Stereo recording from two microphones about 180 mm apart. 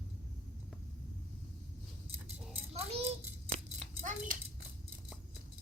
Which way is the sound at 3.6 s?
45° right (ahead or behind).